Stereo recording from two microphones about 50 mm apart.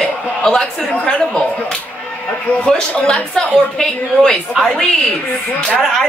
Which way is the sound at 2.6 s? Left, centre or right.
Left.